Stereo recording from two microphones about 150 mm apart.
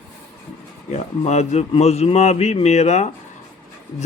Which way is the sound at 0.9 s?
50° left (ahead or behind).